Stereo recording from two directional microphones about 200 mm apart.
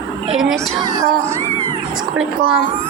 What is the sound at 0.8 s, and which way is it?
Speech, 15° right (ahead or behind).